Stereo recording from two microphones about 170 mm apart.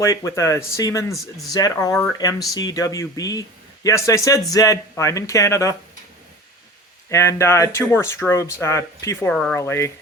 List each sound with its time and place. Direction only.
0.0 s speech: 15° left (ahead or behind)
7.1 s speech: 15° left (ahead or behind)
9.3 s speech: 5° left (ahead or behind)
9.6 s speech: 15° left (ahead or behind)